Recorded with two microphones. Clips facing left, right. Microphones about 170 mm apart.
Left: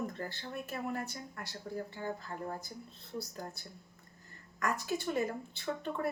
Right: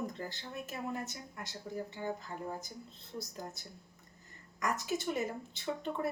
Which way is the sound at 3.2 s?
20° right (ahead or behind).